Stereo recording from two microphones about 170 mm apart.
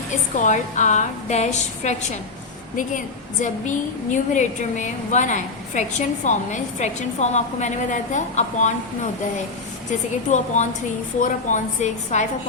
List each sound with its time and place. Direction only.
0.3 s a woman's voice: 45° left (ahead or behind)
3.4 s a woman's voice: 45° left (ahead or behind)
10.2 s a woman's voice: 45° left (ahead or behind)